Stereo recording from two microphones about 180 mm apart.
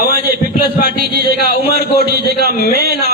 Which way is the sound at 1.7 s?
60° right (ahead or behind).